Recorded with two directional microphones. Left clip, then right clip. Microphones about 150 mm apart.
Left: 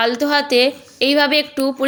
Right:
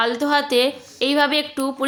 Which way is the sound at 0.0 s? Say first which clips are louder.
Left 2 dB; 20° left (ahead or behind).